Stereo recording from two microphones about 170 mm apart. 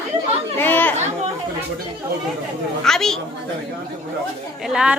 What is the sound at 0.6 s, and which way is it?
Speech, 10° left (ahead or behind).